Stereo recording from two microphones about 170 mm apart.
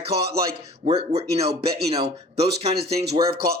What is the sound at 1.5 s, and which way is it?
Speech, 65° right (ahead or behind).